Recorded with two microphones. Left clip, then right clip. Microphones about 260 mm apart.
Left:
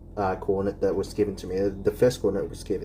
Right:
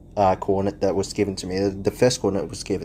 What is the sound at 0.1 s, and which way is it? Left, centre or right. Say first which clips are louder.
Speech: right 6 dB; right.